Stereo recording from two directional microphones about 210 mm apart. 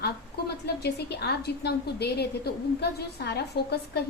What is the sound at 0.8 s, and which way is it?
A woman's voice, 50° left (ahead or behind).